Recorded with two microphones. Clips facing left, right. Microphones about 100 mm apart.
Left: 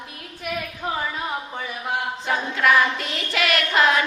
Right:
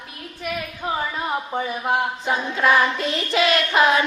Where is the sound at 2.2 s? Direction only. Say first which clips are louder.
Even; 25° right (ahead or behind).